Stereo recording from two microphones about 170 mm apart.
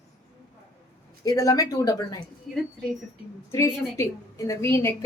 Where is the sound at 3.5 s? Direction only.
15° left (ahead or behind).